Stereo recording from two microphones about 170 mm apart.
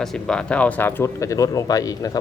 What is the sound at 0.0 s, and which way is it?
Speech, 5° left (ahead or behind).